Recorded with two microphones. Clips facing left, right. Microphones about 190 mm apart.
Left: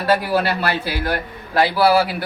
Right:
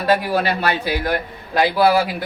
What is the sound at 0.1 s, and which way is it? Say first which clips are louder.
A man's voice: even; 20° right (ahead or behind).